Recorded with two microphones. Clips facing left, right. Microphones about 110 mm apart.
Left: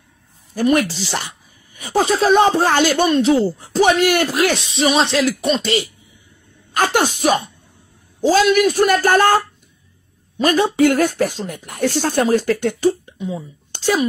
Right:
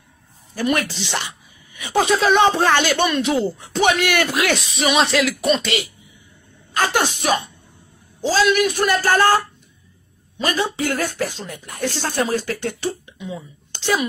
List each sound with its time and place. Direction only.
0.7 s a woman's voice: 40° left (ahead or behind)
6.7 s speech: 45° left (ahead or behind)